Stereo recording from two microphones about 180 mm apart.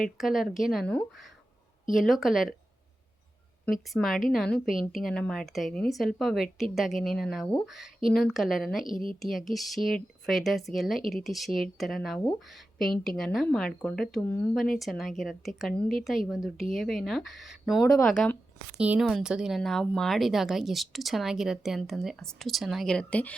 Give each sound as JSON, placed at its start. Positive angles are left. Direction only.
{"t": 0.2, "sound": "speech", "side_deg": 0}
{"t": 3.7, "sound": "speech", "side_deg": 0}